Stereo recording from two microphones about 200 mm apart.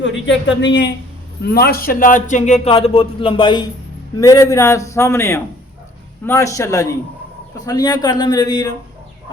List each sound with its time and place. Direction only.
0.0 s a man's voice: 65° left (ahead or behind)
1.5 s a man's voice: 50° left (ahead or behind); by 8.7 s 20° left (ahead or behind)